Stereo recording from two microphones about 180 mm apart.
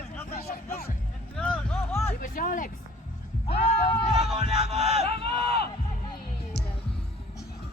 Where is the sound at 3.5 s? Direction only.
60° left (ahead or behind).